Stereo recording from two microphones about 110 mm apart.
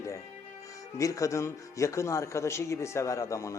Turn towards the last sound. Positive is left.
turn(degrees=30)  # may be behind; listen again after turning